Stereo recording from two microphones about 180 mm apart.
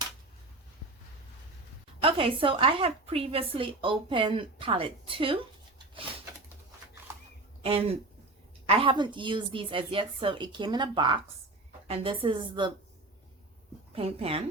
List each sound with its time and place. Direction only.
2.0 s a woman's voice: 30° right (ahead or behind)
7.6 s a woman's voice: 35° right (ahead or behind)
13.9 s a woman's voice: 30° right (ahead or behind)